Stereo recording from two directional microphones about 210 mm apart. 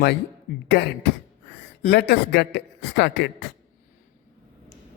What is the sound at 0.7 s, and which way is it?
A man's voice, 50° left (ahead or behind).